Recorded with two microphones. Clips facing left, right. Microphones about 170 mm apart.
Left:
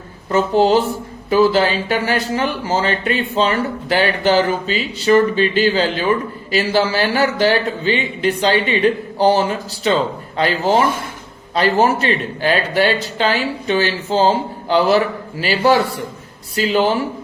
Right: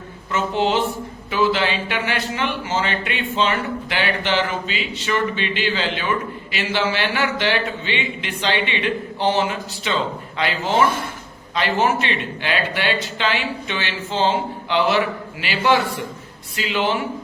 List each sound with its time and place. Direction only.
0.3 s speech: 40° left (ahead or behind)